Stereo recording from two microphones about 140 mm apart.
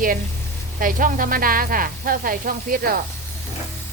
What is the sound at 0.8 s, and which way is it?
Sizzle, 80° right.